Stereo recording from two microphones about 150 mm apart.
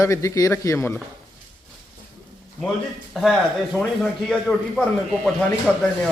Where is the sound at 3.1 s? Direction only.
Centre (ahead or behind).